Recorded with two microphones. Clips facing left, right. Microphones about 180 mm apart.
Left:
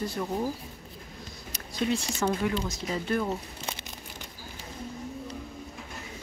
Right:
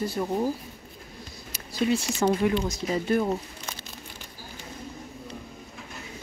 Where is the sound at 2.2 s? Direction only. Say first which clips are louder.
Right 5 dB; 25° right (ahead or behind).